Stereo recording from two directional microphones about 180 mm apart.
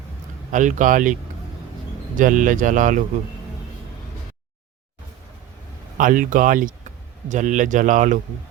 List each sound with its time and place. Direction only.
0.5 s speech: 45° right (ahead or behind)
2.1 s speech: 45° right (ahead or behind)
6.0 s speech: 45° right (ahead or behind)